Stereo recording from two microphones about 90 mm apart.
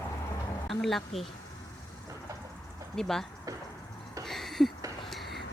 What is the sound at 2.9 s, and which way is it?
Speech, 5° left (ahead or behind).